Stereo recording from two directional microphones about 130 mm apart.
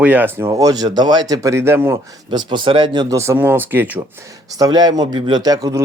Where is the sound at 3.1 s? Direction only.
20° right (ahead or behind).